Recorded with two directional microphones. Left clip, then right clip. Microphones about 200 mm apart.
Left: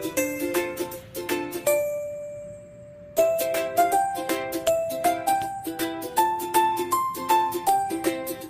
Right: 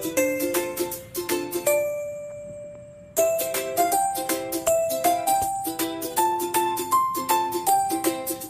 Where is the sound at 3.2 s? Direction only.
Centre (ahead or behind).